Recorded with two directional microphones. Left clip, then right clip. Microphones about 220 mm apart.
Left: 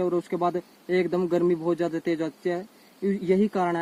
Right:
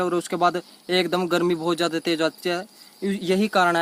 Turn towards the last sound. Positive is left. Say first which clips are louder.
# right 4 dB
turn(degrees=-15)  # may be behind; listen again after turning